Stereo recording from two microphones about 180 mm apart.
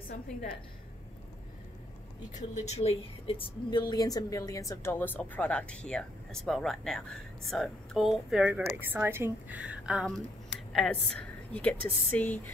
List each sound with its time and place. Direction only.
2.3 s a woman's voice: 40° left (ahead or behind); by 12.4 s 10° left (ahead or behind)